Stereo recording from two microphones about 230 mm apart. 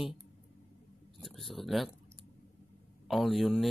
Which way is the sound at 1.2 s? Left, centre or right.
Centre.